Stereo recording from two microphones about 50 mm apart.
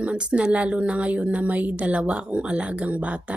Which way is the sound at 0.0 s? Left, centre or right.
Right.